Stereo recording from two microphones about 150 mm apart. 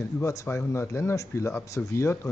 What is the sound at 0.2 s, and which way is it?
Speech, 20° left (ahead or behind).